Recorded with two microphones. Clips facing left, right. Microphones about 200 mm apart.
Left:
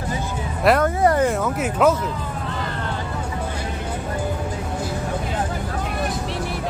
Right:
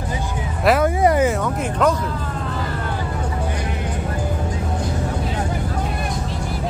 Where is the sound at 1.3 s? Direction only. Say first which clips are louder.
Even; 5° left (ahead or behind).